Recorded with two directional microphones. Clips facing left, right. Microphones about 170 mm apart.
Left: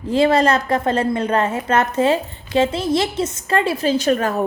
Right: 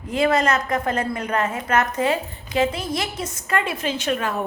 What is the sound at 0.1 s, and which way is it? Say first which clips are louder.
A woman's voice: left 4 dB; 30° left (ahead or behind).